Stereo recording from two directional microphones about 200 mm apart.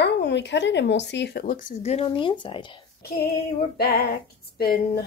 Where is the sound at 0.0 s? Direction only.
60° left (ahead or behind); by 2.8 s 25° left (ahead or behind).